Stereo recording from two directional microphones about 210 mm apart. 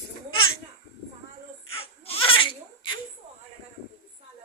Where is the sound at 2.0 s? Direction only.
25° left (ahead or behind).